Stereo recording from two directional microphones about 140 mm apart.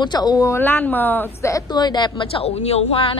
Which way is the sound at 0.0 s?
30° left (ahead or behind).